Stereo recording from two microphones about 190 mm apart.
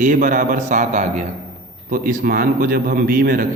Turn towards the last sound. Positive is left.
turn(degrees=-50)  # may be behind; listen again after turning